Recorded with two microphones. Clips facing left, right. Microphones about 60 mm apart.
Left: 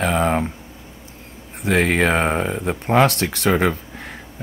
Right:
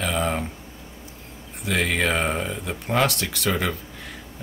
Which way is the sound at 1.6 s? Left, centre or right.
Left.